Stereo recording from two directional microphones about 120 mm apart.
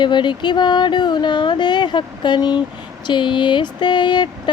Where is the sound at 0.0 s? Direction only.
40° left (ahead or behind).